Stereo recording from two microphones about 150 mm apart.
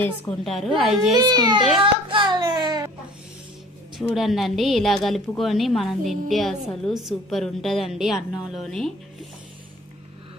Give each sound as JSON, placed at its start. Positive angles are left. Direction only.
{"t": 0.0, "sound": "a woman's voice", "side_deg": 5}
{"t": 1.1, "sound": "a child's voice", "side_deg": -30}
{"t": 1.8, "sound": "hands", "side_deg": -35}
{"t": 3.9, "sound": "a woman's voice", "side_deg": 0}